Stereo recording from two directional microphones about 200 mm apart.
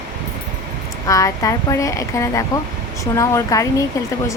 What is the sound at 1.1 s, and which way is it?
A woman's voice, 15° left (ahead or behind).